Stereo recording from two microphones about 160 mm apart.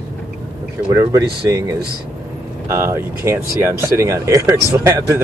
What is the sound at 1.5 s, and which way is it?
Speech, 20° right (ahead or behind).